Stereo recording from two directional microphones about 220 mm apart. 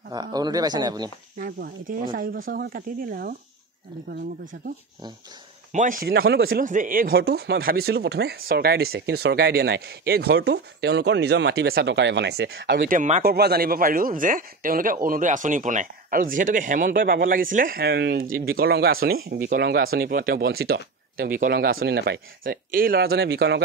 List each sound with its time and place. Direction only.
0.1 s speech: 20° right (ahead or behind)
1.4 s speech: 40° right (ahead or behind)
5.7 s speech: 35° right (ahead or behind)